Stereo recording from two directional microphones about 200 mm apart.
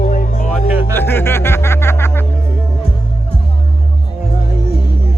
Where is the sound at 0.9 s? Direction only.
10° left (ahead or behind).